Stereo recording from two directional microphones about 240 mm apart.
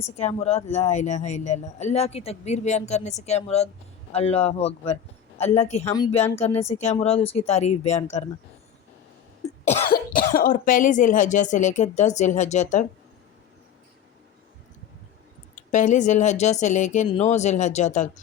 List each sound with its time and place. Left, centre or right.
0.0 s speech: left
9.9 s speech: left
15.5 s speech: left